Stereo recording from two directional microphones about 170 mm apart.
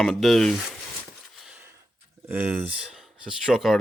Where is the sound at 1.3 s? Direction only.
5° right (ahead or behind).